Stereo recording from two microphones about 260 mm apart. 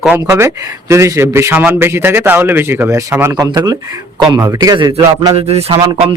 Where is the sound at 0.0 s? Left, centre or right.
Centre.